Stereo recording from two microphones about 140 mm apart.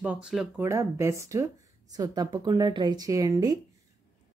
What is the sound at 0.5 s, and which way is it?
Speech, 20° right (ahead or behind).